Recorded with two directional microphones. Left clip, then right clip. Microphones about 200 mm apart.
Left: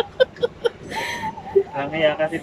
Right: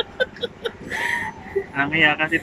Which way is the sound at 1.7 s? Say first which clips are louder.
Right 2 dB; 40° right (ahead or behind).